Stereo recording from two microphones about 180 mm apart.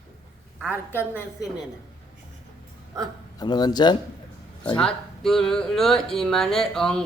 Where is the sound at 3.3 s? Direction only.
25° left (ahead or behind).